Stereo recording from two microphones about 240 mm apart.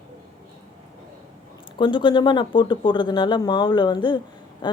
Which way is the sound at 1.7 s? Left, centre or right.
Centre.